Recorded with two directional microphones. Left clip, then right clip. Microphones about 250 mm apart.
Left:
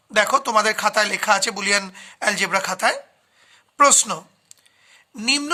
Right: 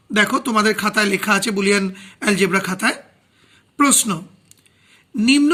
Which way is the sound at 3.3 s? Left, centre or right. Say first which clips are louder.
Left 2 dB; left.